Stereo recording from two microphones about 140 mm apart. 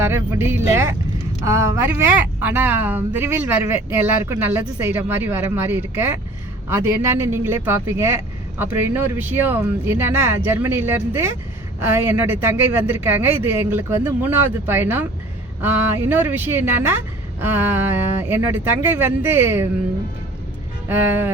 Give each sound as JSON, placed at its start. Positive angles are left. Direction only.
{"t": 0.0, "sound": "speech", "side_deg": -15}
{"t": 20.8, "sound": "speech", "side_deg": -15}